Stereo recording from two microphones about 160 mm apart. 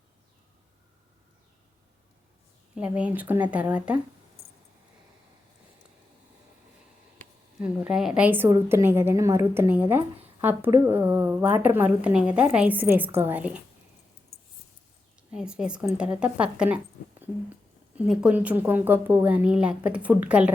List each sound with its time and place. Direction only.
2.7 s a woman's voice: 10° right (ahead or behind)
7.6 s a woman's voice: 5° right (ahead or behind)
15.3 s a woman's voice: 5° right (ahead or behind)